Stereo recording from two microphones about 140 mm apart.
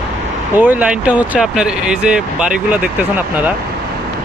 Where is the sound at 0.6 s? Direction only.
10° right (ahead or behind).